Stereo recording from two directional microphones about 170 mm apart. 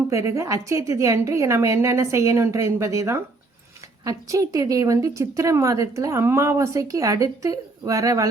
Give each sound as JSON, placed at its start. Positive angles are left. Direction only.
{"t": 0.1, "sound": "a woman's voice", "side_deg": -15}